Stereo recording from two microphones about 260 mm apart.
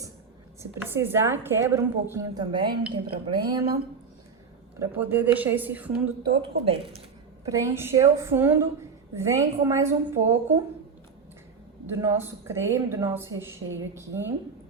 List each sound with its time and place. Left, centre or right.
0.6 s a woman's voice: centre
4.8 s a woman's voice: centre
6.3 s speech: right
7.4 s a woman's voice: centre
11.9 s a woman's voice: centre